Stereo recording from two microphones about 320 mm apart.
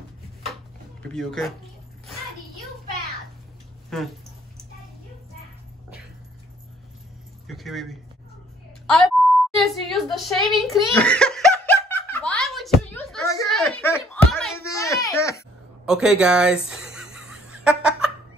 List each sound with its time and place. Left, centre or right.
1.0 s speech: centre
3.9 s speech: centre
7.4 s speech: centre
8.8 s a sound: centre
10.7 s giggle: centre
15.8 s music: centre